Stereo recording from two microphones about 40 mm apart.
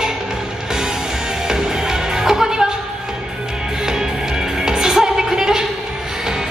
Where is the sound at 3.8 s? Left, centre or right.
Centre.